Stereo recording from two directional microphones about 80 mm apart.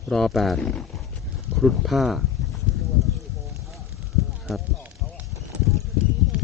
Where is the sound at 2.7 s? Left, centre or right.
Centre.